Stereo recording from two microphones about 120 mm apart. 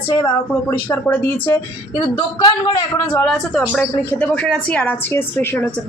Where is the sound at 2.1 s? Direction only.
35° left (ahead or behind).